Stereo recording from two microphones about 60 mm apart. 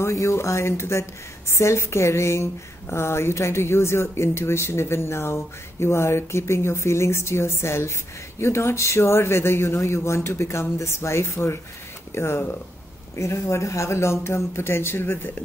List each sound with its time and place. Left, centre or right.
0.0 s speech: left